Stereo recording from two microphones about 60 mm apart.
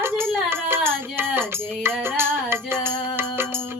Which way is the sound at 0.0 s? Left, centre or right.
Right.